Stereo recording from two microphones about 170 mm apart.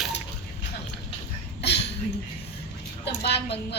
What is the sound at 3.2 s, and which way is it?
Speech, 80° left.